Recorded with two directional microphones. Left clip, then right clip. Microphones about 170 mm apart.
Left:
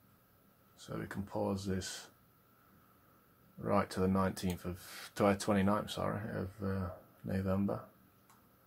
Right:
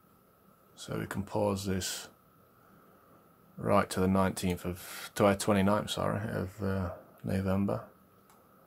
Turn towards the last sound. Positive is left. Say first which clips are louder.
# right 4 dB
turn(degrees=-25)  # may be behind; listen again after turning